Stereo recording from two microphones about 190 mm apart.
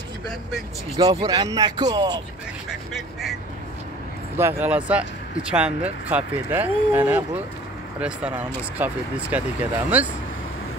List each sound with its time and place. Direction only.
0.9 s speech: 20° right (ahead or behind)
2.9 s speech: centre (ahead or behind)
4.4 s speech: 10° right (ahead or behind)